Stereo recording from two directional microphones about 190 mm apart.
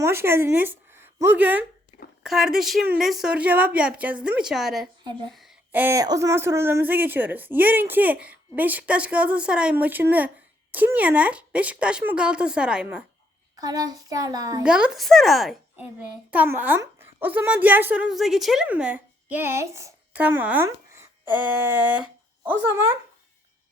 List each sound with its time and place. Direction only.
0.0 s a woman's voice: 15° right (ahead or behind)
13.6 s a child's voice: 20° right (ahead or behind)
14.6 s speech: 5° right (ahead or behind)
20.7 s a sound: 15° right (ahead or behind)
22.6 s speech: 15° right (ahead or behind)